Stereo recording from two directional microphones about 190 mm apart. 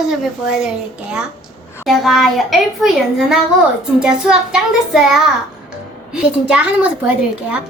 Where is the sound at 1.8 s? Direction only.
Centre (ahead or behind).